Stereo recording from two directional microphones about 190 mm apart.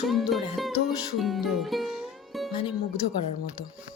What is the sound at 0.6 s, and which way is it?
Music, centre (ahead or behind).